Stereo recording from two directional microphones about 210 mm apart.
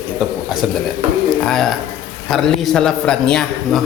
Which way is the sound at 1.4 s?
Centre (ahead or behind).